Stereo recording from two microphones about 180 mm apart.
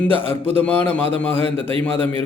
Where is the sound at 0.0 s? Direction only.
10° left (ahead or behind).